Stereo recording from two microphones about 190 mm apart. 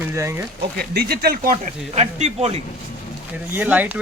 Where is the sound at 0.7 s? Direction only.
55° right (ahead or behind).